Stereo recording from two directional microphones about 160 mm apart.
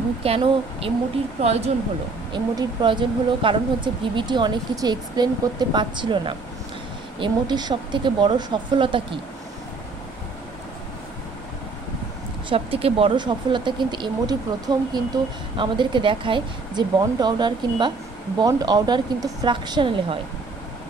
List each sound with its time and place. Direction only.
0.2 s speech: 35° right (ahead or behind)
2.3 s speech: 30° right (ahead or behind)
12.4 s speech: 35° right (ahead or behind)